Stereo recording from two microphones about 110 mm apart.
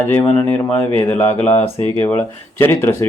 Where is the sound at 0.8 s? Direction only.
20° left (ahead or behind).